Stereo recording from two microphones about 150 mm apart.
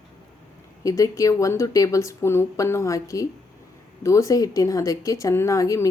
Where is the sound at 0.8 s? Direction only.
20° left (ahead or behind).